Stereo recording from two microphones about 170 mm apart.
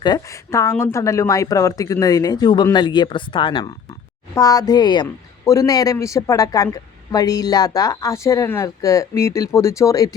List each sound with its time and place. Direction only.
0.0 s a woman's voice: 20° left (ahead or behind)